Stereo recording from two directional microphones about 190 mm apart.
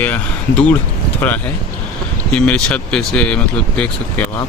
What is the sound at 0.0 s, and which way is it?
Speech, 10° left (ahead or behind).